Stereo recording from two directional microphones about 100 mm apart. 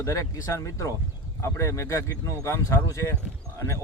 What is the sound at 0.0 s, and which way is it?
Speech, 30° left (ahead or behind).